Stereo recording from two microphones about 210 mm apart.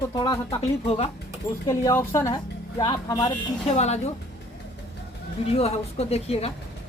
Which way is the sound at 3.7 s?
30° left (ahead or behind).